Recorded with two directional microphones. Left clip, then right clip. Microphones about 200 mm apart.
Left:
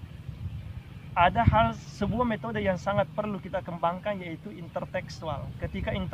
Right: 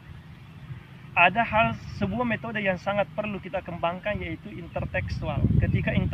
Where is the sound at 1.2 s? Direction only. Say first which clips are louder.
Right 2 dB; 10° left (ahead or behind).